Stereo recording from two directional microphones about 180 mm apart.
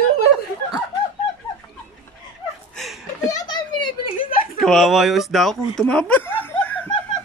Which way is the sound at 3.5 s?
25° left (ahead or behind).